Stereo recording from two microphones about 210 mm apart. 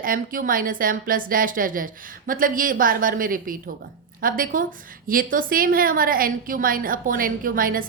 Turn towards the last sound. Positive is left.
turn(degrees=-40)  # may be behind; listen again after turning